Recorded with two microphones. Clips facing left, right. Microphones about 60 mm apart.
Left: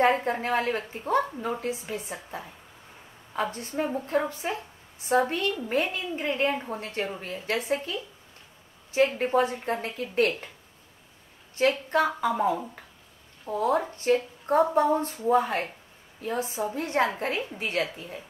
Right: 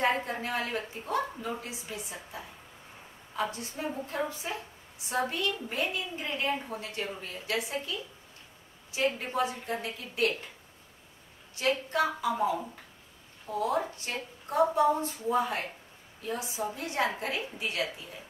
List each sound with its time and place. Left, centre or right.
0.0 s a woman's voice: left
11.5 s a woman's voice: left